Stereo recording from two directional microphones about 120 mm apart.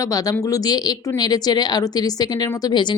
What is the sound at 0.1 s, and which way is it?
A woman's voice, 30° left (ahead or behind).